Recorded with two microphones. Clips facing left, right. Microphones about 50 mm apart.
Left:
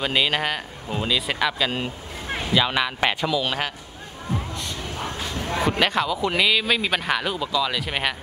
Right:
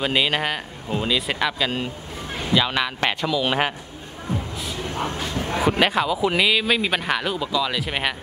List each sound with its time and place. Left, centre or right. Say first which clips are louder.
0.0 s speech: right 1 dB; centre
3.4 s a man's voice: right 4 dB; centre
4.9 s speech: right 4 dB; centre